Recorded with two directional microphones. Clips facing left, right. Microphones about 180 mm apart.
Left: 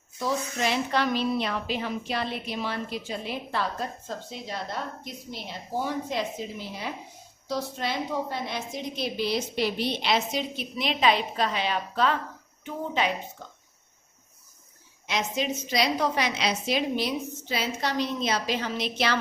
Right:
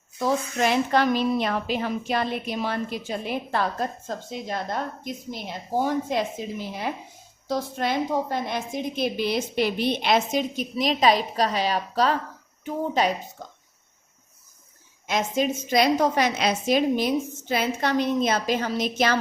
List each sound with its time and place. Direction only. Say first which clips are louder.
0.2 s a woman's voice: right 4 dB; 50° right (ahead or behind)
7.4 s a woman's voice: right 4 dB; 50° right (ahead or behind)
15.0 s a woman's voice: right 5 dB; 50° right (ahead or behind)